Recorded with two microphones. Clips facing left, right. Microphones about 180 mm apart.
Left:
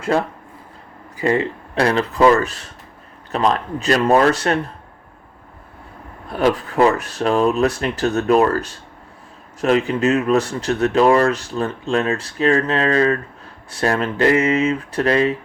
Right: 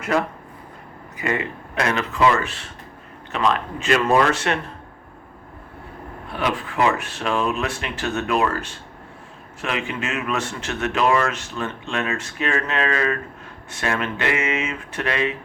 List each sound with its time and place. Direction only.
0.0 s speech: 30° left (ahead or behind)
6.3 s speech: 40° left (ahead or behind)